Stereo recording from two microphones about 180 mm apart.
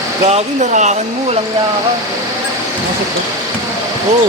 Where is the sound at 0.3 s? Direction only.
40° right (ahead or behind).